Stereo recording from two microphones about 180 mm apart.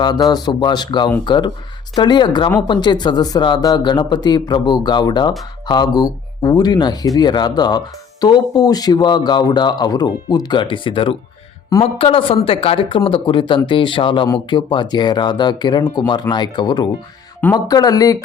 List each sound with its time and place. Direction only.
0.0 s speech: 20° left (ahead or behind)